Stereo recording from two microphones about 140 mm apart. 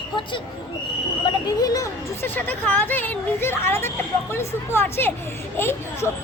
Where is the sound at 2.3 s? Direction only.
10° left (ahead or behind).